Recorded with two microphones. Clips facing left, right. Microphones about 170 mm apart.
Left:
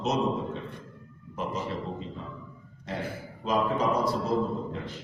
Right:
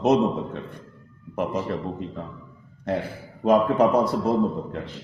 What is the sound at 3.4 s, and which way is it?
Speech, 60° right (ahead or behind).